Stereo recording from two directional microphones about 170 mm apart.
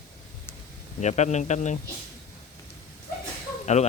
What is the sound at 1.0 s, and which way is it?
Speech, 40° left (ahead or behind).